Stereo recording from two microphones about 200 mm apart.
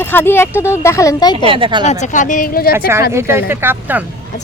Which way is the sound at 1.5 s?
25° right (ahead or behind).